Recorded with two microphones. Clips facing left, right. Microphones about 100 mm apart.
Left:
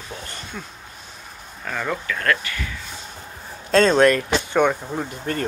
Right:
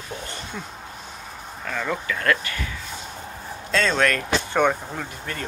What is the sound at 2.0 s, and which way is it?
Speech, 15° right (ahead or behind).